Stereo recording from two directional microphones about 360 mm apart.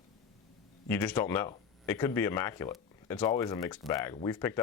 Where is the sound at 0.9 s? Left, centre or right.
Centre.